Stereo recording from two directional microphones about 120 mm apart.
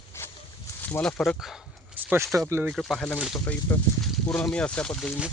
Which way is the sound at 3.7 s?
15° left (ahead or behind).